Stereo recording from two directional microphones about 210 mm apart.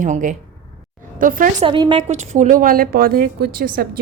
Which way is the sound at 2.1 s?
35° right (ahead or behind).